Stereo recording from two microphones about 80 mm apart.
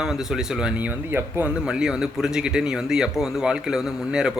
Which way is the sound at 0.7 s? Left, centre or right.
Right.